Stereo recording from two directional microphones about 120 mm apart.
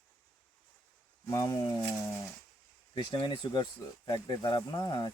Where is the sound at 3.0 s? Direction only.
40° left (ahead or behind).